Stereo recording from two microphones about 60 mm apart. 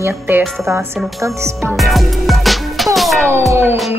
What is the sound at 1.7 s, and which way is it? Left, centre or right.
Music, centre.